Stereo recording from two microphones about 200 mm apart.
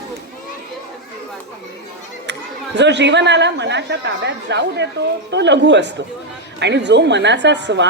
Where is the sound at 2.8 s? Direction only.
60° right (ahead or behind).